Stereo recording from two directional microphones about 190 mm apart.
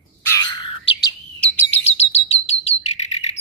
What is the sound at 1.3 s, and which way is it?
Chirp, 5° left (ahead or behind).